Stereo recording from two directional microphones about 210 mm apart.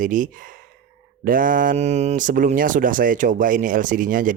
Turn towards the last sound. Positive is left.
turn(degrees=-40)  # may be behind; listen again after turning